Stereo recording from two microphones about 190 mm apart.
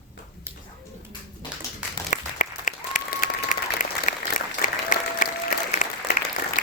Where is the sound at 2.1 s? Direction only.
45° left (ahead or behind).